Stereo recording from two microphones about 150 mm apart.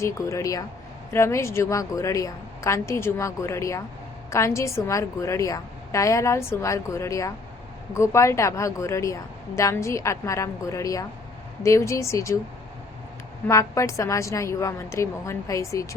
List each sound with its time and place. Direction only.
0.0 s a woman's voice: 20° left (ahead or behind)
13.5 s a woman's voice: 20° left (ahead or behind)